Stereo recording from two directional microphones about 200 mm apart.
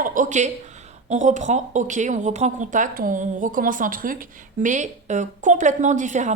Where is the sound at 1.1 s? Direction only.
35° right (ahead or behind).